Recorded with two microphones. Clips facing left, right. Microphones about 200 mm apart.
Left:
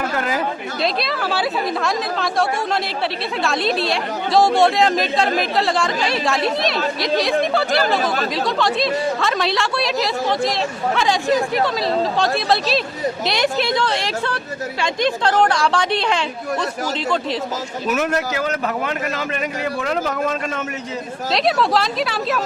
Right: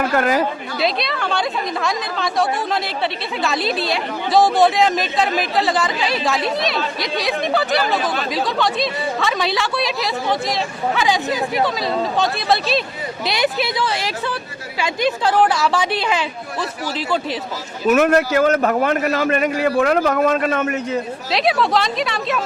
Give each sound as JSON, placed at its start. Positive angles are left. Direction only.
{"t": 0.2, "sound": "speech", "side_deg": -55}
{"t": 0.8, "sound": "speech", "side_deg": 0}
{"t": 17.8, "sound": "a man's voice", "side_deg": -55}
{"t": 21.3, "sound": "speech", "side_deg": 0}